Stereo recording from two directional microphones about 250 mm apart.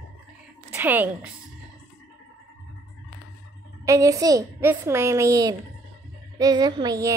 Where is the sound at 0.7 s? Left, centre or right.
Centre.